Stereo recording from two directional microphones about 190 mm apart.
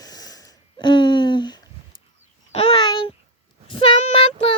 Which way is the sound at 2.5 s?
30° left (ahead or behind).